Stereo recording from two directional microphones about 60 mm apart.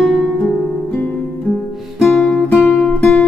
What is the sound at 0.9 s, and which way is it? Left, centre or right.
Music, centre.